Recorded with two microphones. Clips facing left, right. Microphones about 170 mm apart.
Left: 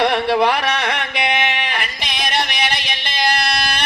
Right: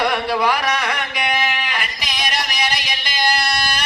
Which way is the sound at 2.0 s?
60° left (ahead or behind).